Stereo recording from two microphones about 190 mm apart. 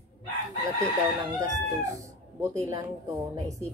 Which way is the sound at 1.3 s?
15° right (ahead or behind).